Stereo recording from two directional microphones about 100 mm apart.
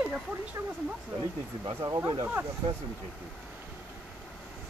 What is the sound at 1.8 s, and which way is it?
Speech, 35° right (ahead or behind).